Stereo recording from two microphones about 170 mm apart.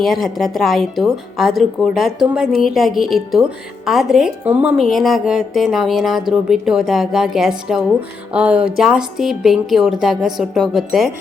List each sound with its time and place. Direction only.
0.0 s speech: centre (ahead or behind)